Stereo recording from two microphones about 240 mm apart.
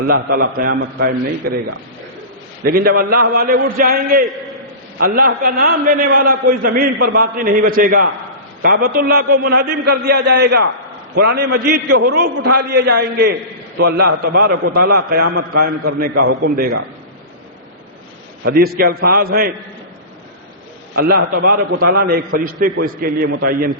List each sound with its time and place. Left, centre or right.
0.0 s a man's voice: right
12.4 s a man's voice: right
12.7 s a man's voice: right
18.4 s a man's voice: right
21.0 s a man's voice: right